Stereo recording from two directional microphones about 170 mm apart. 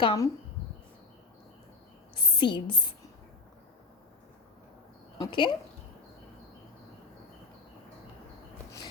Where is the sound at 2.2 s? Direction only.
25° left (ahead or behind).